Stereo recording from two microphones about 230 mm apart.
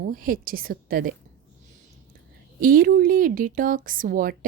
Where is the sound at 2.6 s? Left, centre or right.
Right.